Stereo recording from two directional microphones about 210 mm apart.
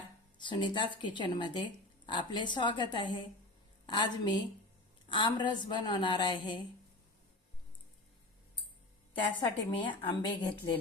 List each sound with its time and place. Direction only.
0.3 s speech: 20° left (ahead or behind)
9.2 s speech: 25° left (ahead or behind)